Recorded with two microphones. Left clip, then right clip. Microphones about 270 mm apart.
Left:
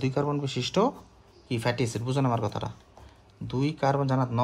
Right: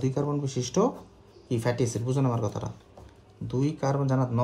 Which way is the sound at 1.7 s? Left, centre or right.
Centre.